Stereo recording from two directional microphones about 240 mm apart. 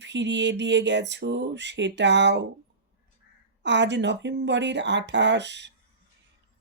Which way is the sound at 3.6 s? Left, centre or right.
Right.